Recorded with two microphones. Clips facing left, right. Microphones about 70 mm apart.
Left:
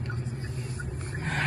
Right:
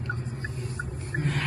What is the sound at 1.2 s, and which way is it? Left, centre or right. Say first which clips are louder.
Vehicle: right 1 dB; left.